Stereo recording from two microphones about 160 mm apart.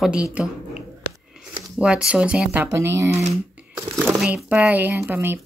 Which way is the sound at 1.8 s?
5° right (ahead or behind).